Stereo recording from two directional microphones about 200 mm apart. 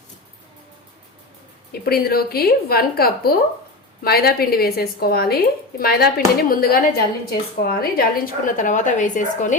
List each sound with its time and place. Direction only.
1.7 s a woman's voice: 50° left (ahead or behind)